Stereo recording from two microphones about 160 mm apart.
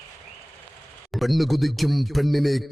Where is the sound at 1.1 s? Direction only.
Centre (ahead or behind).